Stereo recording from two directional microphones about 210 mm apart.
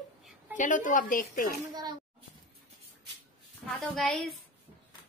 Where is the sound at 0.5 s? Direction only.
40° left (ahead or behind).